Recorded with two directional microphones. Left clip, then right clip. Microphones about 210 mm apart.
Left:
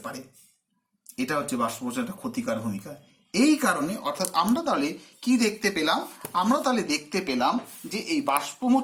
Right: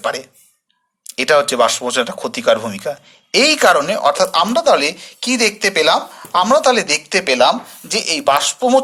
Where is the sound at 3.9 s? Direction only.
40° right (ahead or behind).